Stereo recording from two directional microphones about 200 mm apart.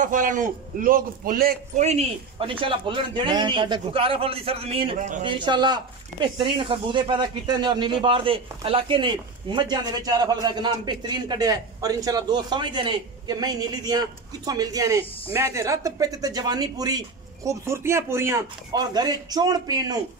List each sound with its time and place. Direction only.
0.0 s a man's voice: 40° right (ahead or behind)
1.9 s speech: 30° right (ahead or behind)
4.9 s a man's voice: 40° right (ahead or behind)
5.2 s speech: 25° right (ahead or behind)